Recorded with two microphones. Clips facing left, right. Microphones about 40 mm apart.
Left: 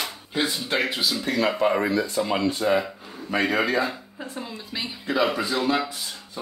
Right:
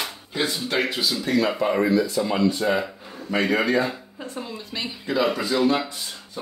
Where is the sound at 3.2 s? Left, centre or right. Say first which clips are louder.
Right 1 dB; centre.